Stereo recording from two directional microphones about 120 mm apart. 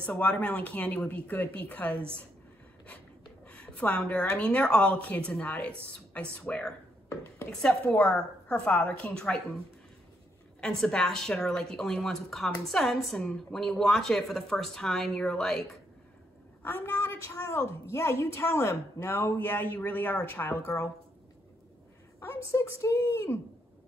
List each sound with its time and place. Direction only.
0.0 s speech: 10° left (ahead or behind)
3.4 s speech: 10° left (ahead or behind)
10.6 s a woman's voice: 5° left (ahead or behind)
16.6 s a woman's voice: 20° left (ahead or behind)
22.2 s a woman's voice: 25° left (ahead or behind)